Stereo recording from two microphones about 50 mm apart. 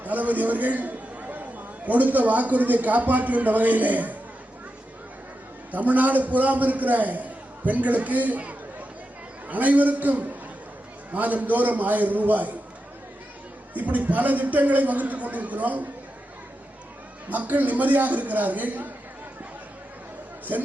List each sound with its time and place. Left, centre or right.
0.0 s a man's voice: right
5.7 s a man's voice: right
13.7 s a man's voice: right
17.2 s a man's voice: right